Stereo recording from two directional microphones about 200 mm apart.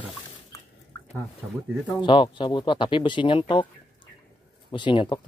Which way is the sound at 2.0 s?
25° left (ahead or behind).